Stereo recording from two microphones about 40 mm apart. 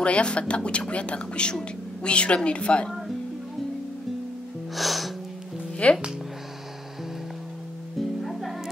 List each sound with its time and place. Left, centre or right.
0.0 s speech: left
4.7 s music: centre
5.8 s speech: left
8.0 s music: centre